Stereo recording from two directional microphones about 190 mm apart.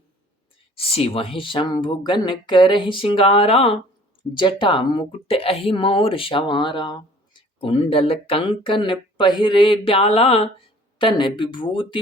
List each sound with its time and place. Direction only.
0.8 s a woman's voice: 30° left (ahead or behind)